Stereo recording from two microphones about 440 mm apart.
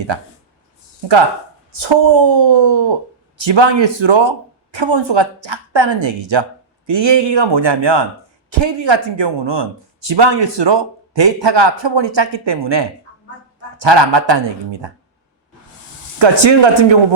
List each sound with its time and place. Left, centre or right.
0.1 s speech: right
16.1 s speech: right